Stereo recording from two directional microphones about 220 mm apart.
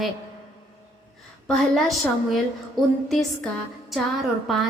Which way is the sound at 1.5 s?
Centre (ahead or behind).